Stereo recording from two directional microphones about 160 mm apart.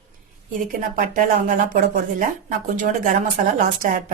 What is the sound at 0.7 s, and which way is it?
Speech, 55° right (ahead or behind).